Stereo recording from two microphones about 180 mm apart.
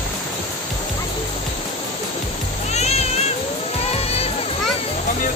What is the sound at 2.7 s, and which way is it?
Music, 40° left (ahead or behind).